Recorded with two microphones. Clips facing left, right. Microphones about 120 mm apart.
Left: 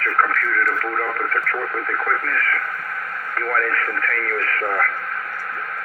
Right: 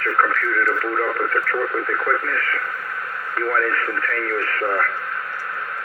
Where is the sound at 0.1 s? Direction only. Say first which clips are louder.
Right 1 dB; 10° right (ahead or behind).